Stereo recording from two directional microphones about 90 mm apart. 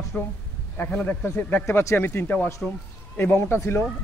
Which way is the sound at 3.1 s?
25° left (ahead or behind).